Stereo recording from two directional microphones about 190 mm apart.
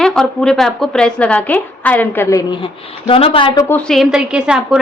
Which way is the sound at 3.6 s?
5° left (ahead or behind).